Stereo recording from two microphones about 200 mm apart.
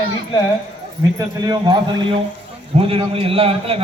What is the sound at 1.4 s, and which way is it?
A man's voice, 20° right (ahead or behind).